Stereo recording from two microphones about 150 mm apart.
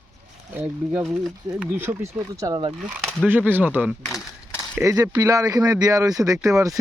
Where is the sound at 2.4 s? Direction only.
25° right (ahead or behind).